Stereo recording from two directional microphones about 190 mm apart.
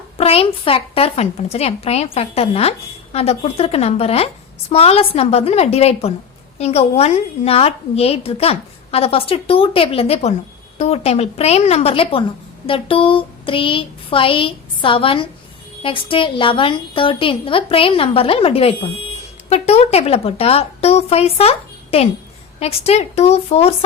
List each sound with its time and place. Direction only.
0.2 s a woman's voice: 30° left (ahead or behind)